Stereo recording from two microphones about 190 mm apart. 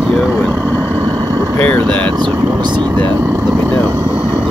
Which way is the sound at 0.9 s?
20° right (ahead or behind).